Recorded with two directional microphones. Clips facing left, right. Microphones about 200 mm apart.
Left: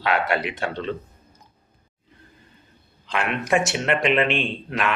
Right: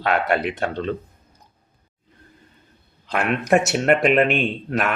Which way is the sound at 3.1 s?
40° right (ahead or behind).